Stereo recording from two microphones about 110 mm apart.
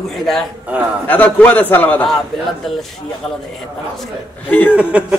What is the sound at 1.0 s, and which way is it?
A man's voice, 15° left (ahead or behind).